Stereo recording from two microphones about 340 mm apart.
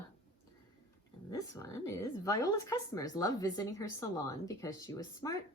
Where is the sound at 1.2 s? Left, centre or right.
Centre.